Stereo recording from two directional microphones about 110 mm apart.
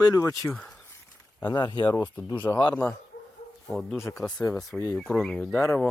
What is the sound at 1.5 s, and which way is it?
Speech, 40° left (ahead or behind).